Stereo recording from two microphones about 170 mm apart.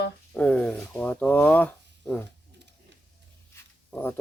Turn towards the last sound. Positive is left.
turn(degrees=10)  # may be behind; listen again after turning